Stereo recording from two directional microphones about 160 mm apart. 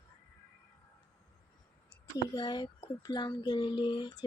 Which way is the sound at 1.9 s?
25° left (ahead or behind).